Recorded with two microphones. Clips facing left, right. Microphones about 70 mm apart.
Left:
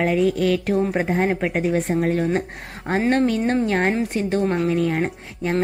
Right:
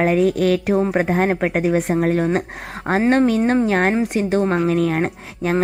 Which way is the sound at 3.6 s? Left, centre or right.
Right.